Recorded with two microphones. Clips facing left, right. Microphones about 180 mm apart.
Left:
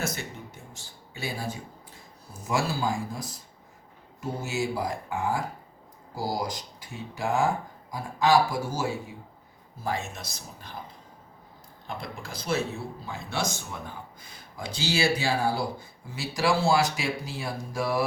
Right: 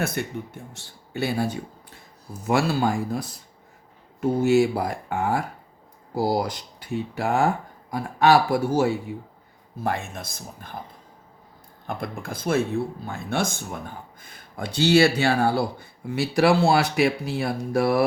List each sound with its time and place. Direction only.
0.0 s speech: 55° right (ahead or behind)
11.9 s speech: 55° right (ahead or behind)